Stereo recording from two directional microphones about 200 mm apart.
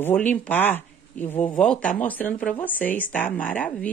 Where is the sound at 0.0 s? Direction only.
10° left (ahead or behind).